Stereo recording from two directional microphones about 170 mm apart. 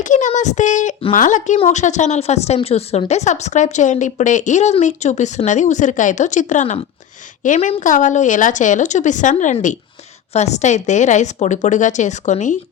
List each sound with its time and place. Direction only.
0.0 s a woman's voice: 45° left (ahead or behind)